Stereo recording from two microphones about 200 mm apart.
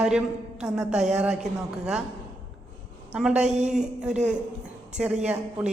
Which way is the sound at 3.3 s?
35° right (ahead or behind).